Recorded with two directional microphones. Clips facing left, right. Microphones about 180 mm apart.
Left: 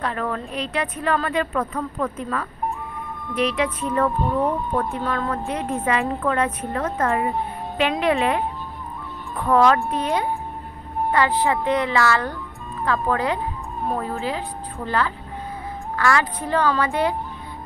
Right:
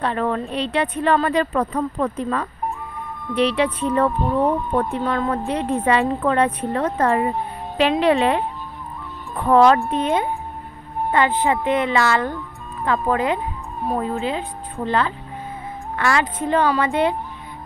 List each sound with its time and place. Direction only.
0.0 s speech: 25° right (ahead or behind)
5.0 s speech: 20° right (ahead or behind)
5.5 s speech: 30° right (ahead or behind)
9.4 s a woman's voice: 30° right (ahead or behind)